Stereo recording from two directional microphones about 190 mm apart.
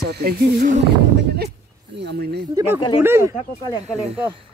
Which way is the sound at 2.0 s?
60° right (ahead or behind).